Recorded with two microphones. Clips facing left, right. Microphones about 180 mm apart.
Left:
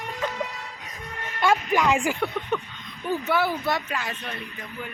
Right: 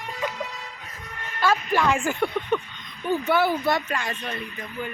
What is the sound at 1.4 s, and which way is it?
Speech, 15° left (ahead or behind).